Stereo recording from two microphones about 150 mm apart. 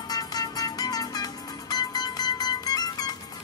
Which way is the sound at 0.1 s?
25° left (ahead or behind).